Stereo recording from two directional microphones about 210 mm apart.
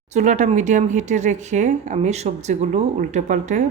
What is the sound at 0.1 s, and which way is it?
Speech, 35° right (ahead or behind).